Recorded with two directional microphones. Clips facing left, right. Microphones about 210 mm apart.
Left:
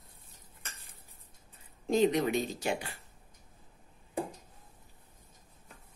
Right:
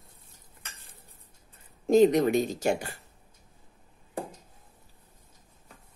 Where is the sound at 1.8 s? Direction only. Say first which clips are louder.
Right 7 dB; 45° right (ahead or behind).